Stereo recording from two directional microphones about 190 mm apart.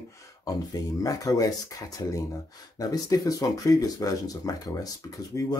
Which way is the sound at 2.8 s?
20° left (ahead or behind).